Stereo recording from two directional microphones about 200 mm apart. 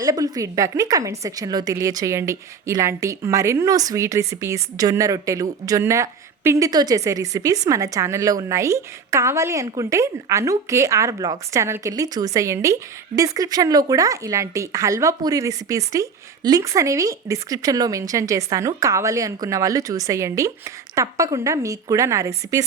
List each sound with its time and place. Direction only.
0.0 s a woman's voice: 15° right (ahead or behind)